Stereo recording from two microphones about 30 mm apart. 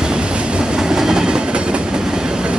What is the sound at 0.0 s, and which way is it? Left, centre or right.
Train, right.